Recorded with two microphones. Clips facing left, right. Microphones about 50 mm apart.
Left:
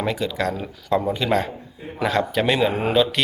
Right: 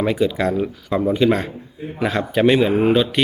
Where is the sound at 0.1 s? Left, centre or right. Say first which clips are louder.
Right 5 dB; centre.